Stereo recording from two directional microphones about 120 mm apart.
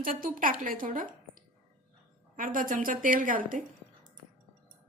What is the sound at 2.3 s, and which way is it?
A woman's voice, 90° right.